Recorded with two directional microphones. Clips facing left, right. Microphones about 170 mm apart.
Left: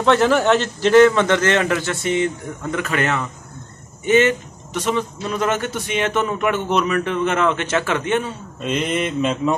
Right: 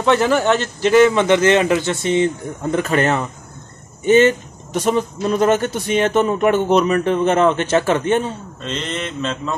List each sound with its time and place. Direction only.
0.0 s a man's voice: 5° right (ahead or behind); by 8.3 s 35° right (ahead or behind)
8.6 s mantra: 10° left (ahead or behind)